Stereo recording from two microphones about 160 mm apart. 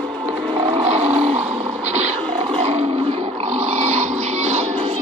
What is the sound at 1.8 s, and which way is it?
Wild animals, 45° right (ahead or behind).